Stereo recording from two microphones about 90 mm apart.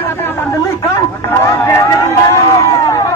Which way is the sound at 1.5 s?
35° left (ahead or behind).